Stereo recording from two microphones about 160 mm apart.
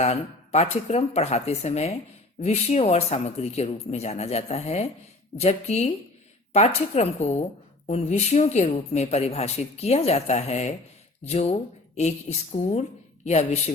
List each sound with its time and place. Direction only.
0.0 s speech: 40° left (ahead or behind)
13.2 s speech: 45° left (ahead or behind)